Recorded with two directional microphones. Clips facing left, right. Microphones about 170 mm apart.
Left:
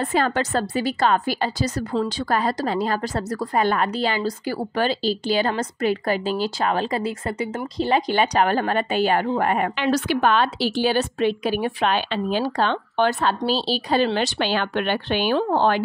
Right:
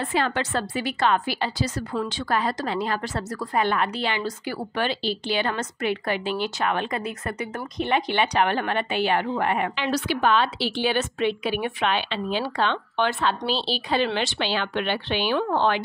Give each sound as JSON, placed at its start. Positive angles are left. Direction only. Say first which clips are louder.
{"t": 0.0, "sound": "a woman's voice", "louder": "left 3 dB", "side_deg": 45}
{"t": 15.3, "sound": "a woman's voice", "louder": "left 3 dB", "side_deg": 30}